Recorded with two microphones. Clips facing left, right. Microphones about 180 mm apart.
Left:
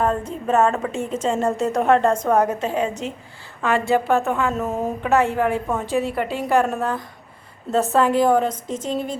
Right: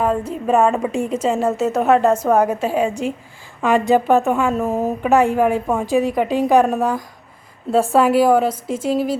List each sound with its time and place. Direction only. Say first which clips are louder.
0.0 s a woman's voice: right 3 dB; 10° right (ahead or behind)